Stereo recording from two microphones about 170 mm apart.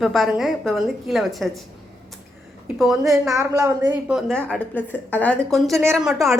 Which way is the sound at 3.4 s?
20° right (ahead or behind).